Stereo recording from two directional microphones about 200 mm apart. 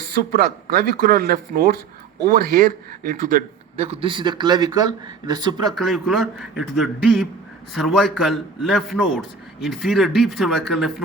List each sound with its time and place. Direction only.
0.0 s a man's voice: 50° right (ahead or behind); by 5.5 s 20° right (ahead or behind)
5.7 s a man's voice: centre (ahead or behind)